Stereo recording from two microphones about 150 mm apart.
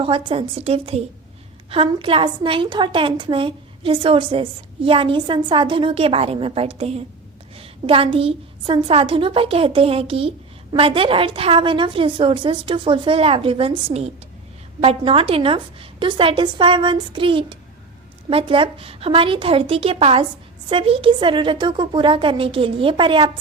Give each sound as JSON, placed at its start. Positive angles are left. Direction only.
{"t": 0.0, "sound": "a woman's voice", "side_deg": -40}